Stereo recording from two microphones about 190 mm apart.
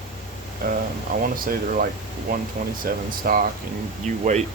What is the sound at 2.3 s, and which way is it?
Speech, 45° right (ahead or behind).